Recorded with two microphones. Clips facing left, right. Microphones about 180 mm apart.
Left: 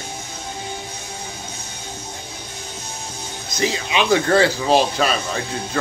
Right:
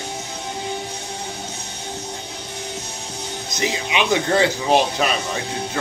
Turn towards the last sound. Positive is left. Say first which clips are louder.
# even
turn(degrees=-15)  # may be behind; listen again after turning